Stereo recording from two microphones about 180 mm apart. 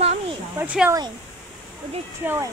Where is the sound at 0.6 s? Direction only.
10° right (ahead or behind).